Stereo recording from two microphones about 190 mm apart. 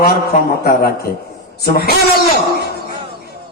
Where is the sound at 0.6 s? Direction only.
50° left (ahead or behind).